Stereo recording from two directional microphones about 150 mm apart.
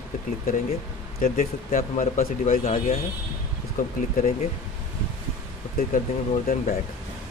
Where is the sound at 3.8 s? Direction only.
60° left (ahead or behind).